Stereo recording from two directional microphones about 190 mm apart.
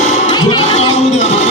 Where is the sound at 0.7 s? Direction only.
35° left (ahead or behind).